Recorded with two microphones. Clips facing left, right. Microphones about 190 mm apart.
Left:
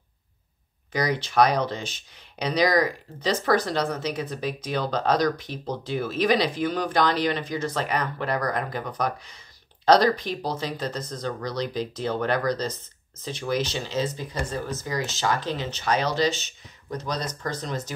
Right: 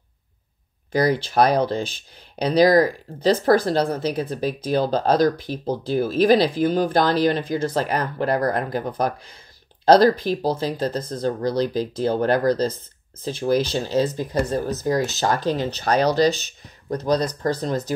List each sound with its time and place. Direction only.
0.9 s speech: 30° right (ahead or behind)